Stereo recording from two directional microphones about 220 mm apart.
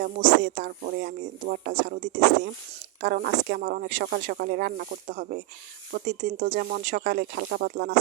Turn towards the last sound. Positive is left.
turn(degrees=-40)  # may be behind; listen again after turning